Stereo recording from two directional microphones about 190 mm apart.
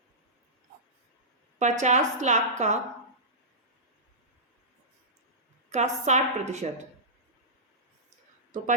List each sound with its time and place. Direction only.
1.5 s a woman's voice: 40° right (ahead or behind)
5.7 s a woman's voice: 35° right (ahead or behind)